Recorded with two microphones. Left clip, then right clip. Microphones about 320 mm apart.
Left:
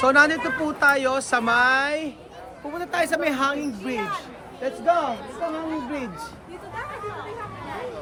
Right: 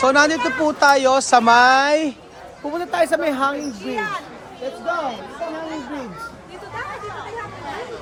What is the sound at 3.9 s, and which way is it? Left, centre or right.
Speech, right.